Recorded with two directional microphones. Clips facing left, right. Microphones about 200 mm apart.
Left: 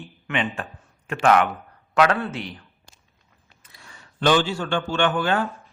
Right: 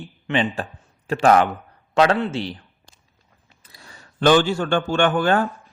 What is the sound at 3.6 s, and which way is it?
A man's voice, 35° right (ahead or behind).